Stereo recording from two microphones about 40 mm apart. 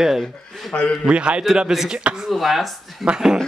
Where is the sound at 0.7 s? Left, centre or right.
Left.